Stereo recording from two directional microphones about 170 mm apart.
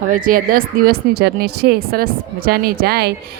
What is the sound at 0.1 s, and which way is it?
A woman's voice, 55° right (ahead or behind).